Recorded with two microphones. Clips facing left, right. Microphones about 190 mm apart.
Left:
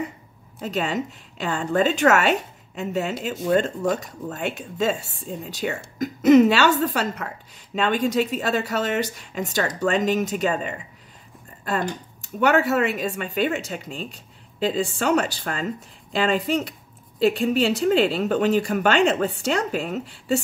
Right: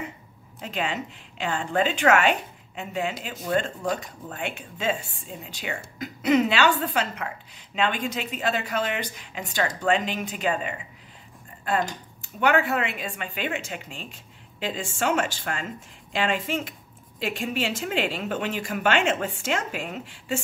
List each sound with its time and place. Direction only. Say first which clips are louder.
0.6 s a woman's voice: left 4 dB; 40° left (ahead or behind)
12.4 s a woman's voice: left 4 dB; 40° left (ahead or behind)